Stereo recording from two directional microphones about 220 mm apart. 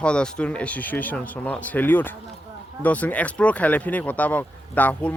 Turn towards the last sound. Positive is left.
turn(degrees=5)  # may be behind; listen again after turning